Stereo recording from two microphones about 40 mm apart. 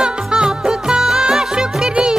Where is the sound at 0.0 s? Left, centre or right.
Centre.